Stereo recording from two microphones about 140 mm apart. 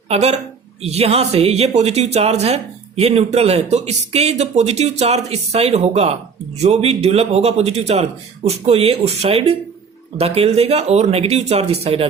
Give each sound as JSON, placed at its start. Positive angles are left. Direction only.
{"t": 0.1, "sound": "speech", "side_deg": -50}